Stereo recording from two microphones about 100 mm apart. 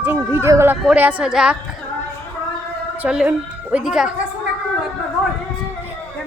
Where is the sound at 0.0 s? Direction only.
20° right (ahead or behind).